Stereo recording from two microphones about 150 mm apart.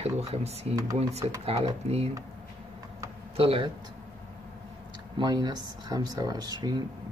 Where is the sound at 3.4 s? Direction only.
40° right (ahead or behind).